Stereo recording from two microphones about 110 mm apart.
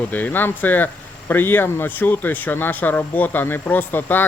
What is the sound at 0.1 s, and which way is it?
Speech, 15° left (ahead or behind).